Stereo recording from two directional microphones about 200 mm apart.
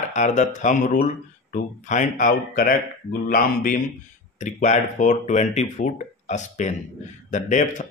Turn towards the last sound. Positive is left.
turn(degrees=40)  # may be behind; listen again after turning